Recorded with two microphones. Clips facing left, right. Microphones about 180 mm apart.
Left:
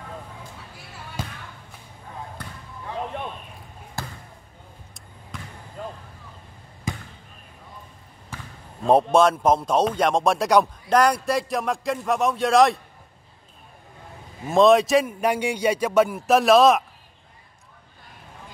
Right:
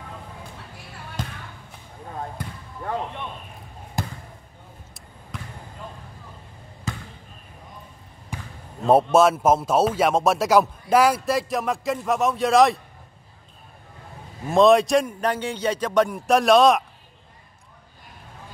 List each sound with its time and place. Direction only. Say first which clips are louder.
1.2 s basketball bounce: right 1 dB; 10° left (ahead or behind)
4.0 s basketball bounce: right 4 dB; 20° right (ahead or behind)
5.3 s basketball bounce: right 1 dB; centre (ahead or behind)
6.9 s basketball bounce: left 1 dB; 15° left (ahead or behind)
8.3 s basketball bounce: right 3 dB; 15° right (ahead or behind)
8.8 s speech: right 1 dB; 5° right (ahead or behind)
14.5 s speech: even; centre (ahead or behind)